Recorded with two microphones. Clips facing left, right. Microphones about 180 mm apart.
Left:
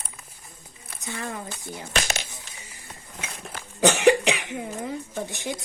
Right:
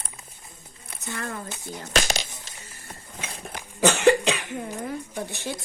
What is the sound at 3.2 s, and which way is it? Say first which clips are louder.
Speech: right 1 dB; 30° right (ahead or behind).